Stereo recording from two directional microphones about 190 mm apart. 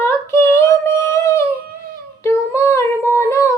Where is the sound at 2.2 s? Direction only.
15° left (ahead or behind).